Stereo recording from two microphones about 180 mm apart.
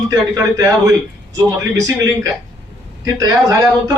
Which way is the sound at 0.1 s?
15° right (ahead or behind).